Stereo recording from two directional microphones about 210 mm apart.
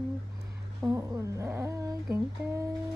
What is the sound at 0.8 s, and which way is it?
Humming, 15° right (ahead or behind).